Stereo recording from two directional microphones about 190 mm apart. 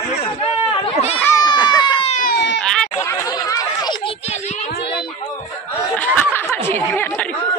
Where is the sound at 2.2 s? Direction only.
65° left (ahead or behind).